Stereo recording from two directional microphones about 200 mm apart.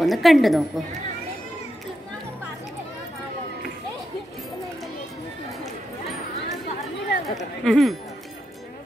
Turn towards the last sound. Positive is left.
turn(degrees=0)  # may be behind; listen again after turning